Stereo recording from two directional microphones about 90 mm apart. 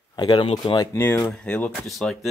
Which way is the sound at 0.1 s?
55° left (ahead or behind).